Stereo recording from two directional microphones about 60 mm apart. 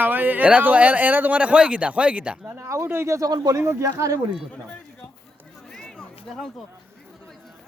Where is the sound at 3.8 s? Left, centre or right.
Right.